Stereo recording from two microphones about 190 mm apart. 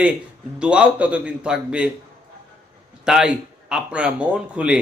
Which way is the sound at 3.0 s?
5° right (ahead or behind).